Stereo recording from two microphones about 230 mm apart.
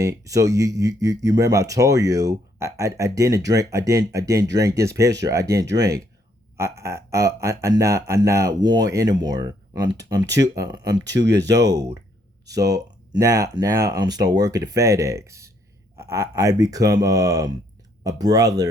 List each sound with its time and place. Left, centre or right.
0.0 s speech: centre